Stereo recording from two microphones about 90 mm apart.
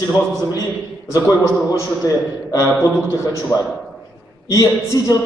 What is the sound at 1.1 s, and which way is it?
A man's voice, 35° left (ahead or behind).